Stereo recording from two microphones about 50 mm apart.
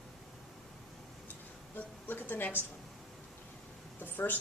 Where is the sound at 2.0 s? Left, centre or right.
Left.